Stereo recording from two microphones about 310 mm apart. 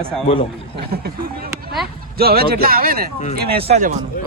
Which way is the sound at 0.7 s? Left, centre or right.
Right.